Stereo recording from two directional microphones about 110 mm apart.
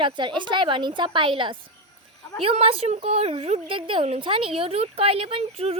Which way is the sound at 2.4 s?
60° right (ahead or behind).